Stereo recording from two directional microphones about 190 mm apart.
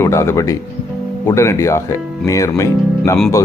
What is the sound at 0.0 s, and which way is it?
Speech, 15° left (ahead or behind).